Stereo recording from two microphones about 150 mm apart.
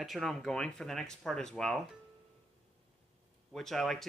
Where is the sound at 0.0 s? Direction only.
Centre (ahead or behind).